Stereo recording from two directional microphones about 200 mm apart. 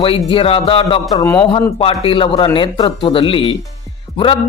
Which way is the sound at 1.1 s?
15° left (ahead or behind).